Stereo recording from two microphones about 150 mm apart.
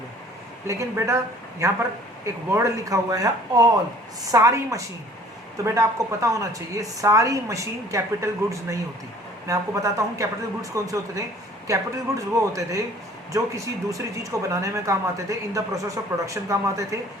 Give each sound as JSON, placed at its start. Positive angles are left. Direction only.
{"t": 0.7, "sound": "a woman's voice", "side_deg": -20}
{"t": 13.9, "sound": "a woman's voice", "side_deg": -20}